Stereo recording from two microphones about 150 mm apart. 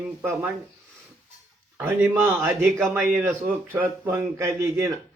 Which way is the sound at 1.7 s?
15° right (ahead or behind).